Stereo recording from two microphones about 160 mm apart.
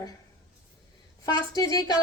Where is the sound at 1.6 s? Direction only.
20° left (ahead or behind).